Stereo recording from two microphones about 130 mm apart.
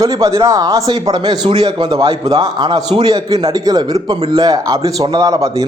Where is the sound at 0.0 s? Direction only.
25° right (ahead or behind).